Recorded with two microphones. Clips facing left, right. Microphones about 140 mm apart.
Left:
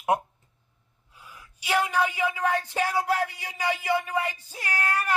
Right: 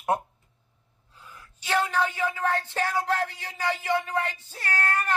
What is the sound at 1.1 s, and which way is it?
A man's voice, 10° left (ahead or behind).